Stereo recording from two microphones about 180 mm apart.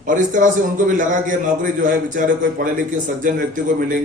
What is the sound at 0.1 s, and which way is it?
A man's voice, 45° right (ahead or behind).